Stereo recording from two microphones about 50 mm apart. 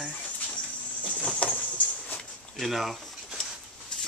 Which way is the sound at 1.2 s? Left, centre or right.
Left.